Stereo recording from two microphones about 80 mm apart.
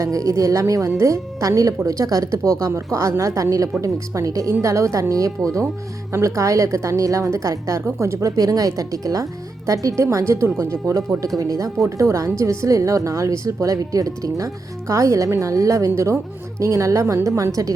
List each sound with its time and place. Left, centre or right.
0.0 s a woman's voice: right